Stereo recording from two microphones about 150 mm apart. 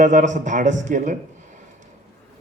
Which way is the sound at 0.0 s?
55° right (ahead or behind).